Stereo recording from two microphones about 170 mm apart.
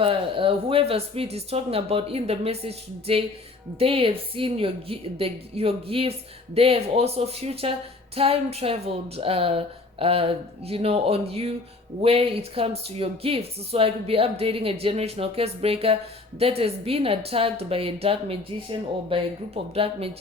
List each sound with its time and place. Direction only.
0.0 s a woman's voice: 30° right (ahead or behind)